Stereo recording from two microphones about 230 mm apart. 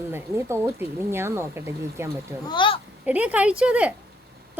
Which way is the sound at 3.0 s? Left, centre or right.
Centre.